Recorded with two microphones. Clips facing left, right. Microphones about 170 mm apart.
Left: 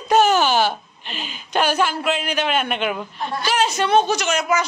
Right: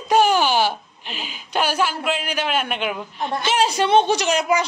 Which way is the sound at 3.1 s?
20° right (ahead or behind).